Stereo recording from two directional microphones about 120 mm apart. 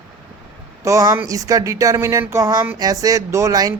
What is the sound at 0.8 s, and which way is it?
Speech, 25° right (ahead or behind).